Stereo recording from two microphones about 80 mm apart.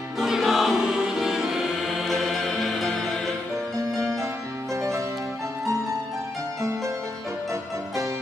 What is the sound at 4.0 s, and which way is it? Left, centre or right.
Music, right.